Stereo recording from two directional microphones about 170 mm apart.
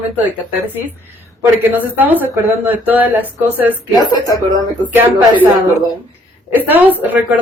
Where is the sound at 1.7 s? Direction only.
10° right (ahead or behind).